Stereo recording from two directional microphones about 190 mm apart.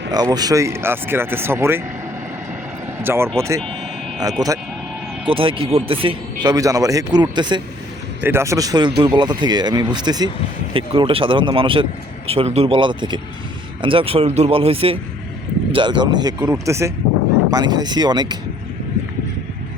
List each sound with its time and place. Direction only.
0.1 s speech: 20° right (ahead or behind)
3.0 s a man's voice: 10° right (ahead or behind)
8.2 s a man's voice: 15° right (ahead or behind)